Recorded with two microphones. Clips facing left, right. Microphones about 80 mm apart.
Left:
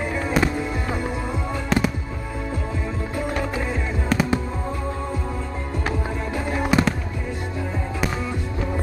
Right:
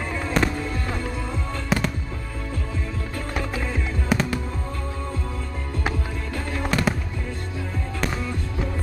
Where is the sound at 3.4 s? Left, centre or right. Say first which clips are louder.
Left 3 dB; centre.